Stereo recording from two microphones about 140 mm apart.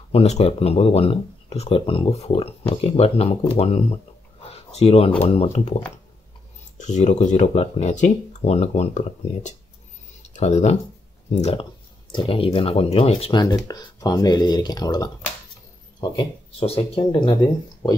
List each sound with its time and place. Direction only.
0.1 s speech: 45° left (ahead or behind)
12.1 s speech: 40° left (ahead or behind)
13.7 s speech: 25° left (ahead or behind)